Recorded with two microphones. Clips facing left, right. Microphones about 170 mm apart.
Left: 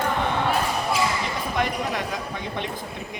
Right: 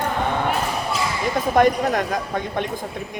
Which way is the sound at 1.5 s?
50° right (ahead or behind).